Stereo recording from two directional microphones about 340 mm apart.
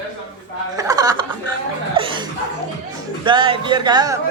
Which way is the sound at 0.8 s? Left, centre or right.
Centre.